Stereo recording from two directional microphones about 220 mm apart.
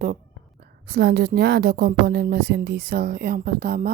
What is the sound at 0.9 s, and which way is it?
Speech, 50° right (ahead or behind).